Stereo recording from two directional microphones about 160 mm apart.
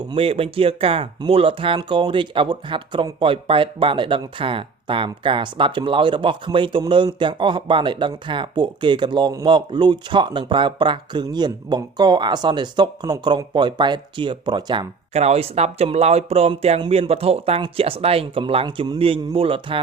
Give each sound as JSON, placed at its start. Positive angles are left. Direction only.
{"t": 0.1, "sound": "speech", "side_deg": -35}